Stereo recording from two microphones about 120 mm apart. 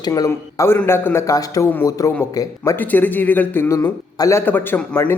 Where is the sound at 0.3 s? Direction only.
20° left (ahead or behind).